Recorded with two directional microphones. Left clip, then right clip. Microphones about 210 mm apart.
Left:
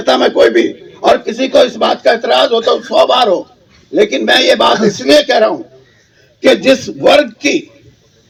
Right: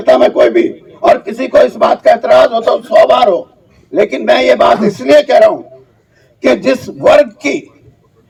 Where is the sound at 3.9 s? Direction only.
55° right (ahead or behind).